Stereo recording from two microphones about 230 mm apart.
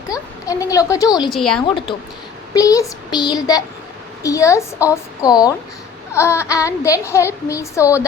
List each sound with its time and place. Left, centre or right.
0.1 s speech: centre
1.3 s speech: centre
2.5 s speech: centre